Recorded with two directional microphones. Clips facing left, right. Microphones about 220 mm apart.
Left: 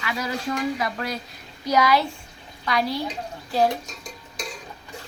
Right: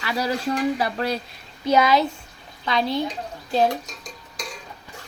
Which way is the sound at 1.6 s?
25° right (ahead or behind).